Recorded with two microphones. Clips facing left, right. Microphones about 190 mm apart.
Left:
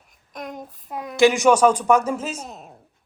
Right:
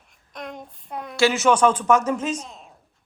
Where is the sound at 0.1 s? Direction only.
Centre (ahead or behind).